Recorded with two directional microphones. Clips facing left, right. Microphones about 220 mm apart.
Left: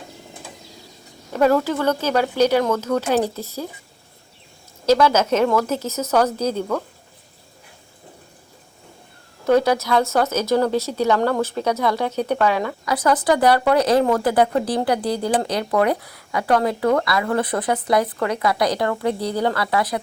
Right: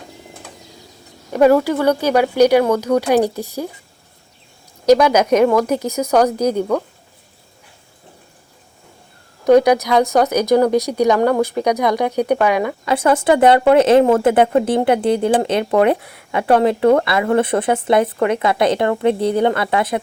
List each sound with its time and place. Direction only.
1.3 s speech: 15° right (ahead or behind)
4.9 s speech: 15° right (ahead or behind)
9.4 s speech: 15° right (ahead or behind)
12.8 s speech: 25° right (ahead or behind)